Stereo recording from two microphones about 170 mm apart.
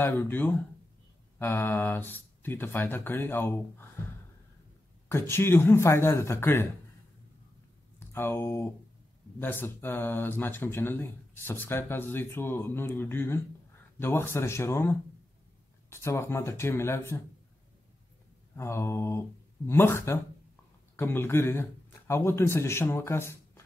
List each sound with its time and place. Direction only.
0.0 s speech: 10° left (ahead or behind)
5.0 s speech: 15° left (ahead or behind)
8.0 s speech: 15° left (ahead or behind)
18.6 s speech: 15° left (ahead or behind)